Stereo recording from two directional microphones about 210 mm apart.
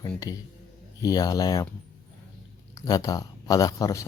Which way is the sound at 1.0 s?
15° left (ahead or behind).